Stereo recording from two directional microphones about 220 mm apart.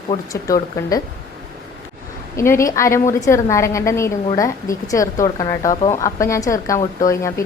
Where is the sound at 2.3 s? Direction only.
10° left (ahead or behind).